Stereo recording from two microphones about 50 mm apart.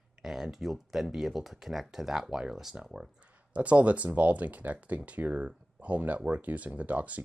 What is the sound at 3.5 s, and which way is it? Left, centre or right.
Speech, right.